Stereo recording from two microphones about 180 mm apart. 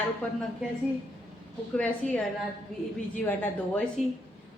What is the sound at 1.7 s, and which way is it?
Speech, 5° left (ahead or behind).